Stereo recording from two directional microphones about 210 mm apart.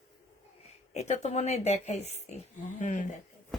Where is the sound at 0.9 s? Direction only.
30° left (ahead or behind).